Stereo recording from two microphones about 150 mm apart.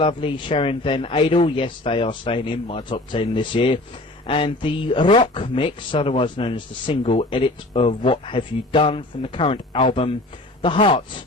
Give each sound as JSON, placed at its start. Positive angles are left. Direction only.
{"t": 0.0, "sound": "speech", "side_deg": 35}